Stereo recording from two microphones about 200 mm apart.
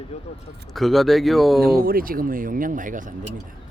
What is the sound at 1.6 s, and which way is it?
Speech, 45° right (ahead or behind).